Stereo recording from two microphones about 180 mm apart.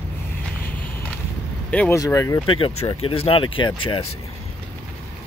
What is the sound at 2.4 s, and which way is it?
Speech, 30° left (ahead or behind).